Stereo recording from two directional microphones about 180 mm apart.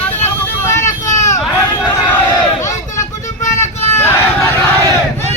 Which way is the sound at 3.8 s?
15° left (ahead or behind).